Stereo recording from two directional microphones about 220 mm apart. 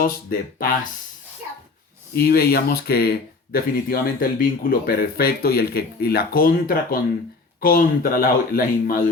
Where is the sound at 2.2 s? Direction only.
45° left (ahead or behind).